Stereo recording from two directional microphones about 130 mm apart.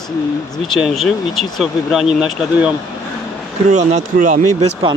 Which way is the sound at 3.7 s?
65° right (ahead or behind).